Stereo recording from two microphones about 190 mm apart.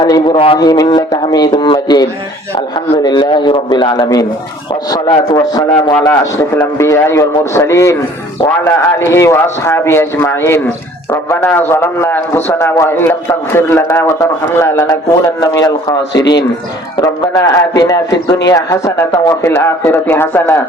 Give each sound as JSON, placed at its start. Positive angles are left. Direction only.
{"t": 0.0, "sound": "a man's voice", "side_deg": 25}